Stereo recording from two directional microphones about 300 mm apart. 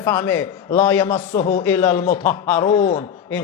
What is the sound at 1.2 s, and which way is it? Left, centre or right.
Speech, left.